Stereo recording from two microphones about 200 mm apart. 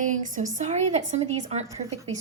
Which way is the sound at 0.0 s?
40° right (ahead or behind).